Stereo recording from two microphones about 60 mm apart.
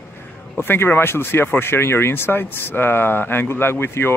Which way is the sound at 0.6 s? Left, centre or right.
Left.